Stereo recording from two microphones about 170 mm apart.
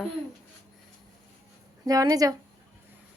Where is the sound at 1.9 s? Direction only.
20° right (ahead or behind).